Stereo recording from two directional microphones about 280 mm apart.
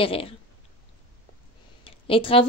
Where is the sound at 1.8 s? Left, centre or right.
Centre.